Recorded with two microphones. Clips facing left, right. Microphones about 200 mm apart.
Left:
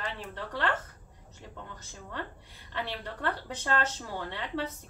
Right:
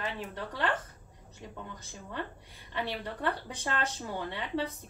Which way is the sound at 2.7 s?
15° right (ahead or behind).